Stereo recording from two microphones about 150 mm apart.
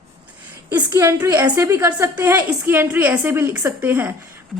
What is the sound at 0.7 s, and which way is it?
A woman's voice, 20° right (ahead or behind).